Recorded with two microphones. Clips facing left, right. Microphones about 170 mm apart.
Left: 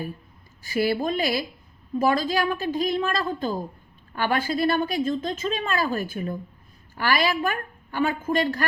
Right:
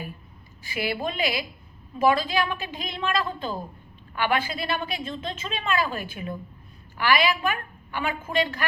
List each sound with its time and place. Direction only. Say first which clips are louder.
0.6 s a woman's voice: left 5 dB; 45° left (ahead or behind)